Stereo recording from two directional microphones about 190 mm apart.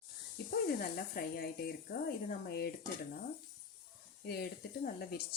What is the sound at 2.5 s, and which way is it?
Stir, 55° left (ahead or behind).